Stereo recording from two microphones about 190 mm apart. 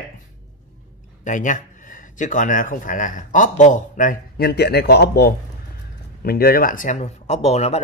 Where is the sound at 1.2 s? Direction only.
40° left (ahead or behind).